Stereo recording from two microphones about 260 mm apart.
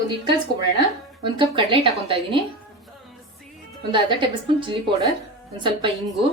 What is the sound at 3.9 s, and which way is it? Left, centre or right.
A woman's voice, centre.